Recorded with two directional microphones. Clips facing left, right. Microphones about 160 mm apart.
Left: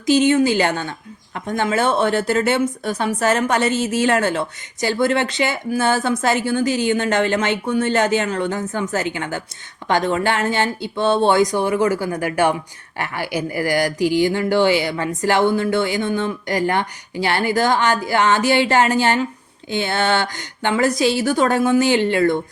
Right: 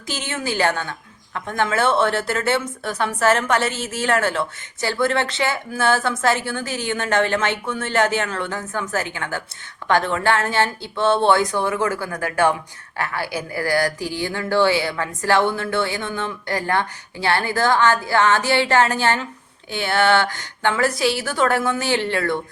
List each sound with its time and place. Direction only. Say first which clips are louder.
0.0 s speech: left 13 dB; 15° left (ahead or behind)